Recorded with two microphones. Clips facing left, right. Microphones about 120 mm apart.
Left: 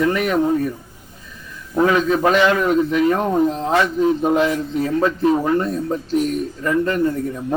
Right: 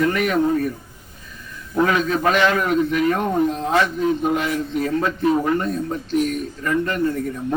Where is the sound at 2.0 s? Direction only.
25° left (ahead or behind).